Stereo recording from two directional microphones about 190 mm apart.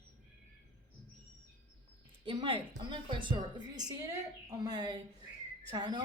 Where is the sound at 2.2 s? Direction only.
25° right (ahead or behind).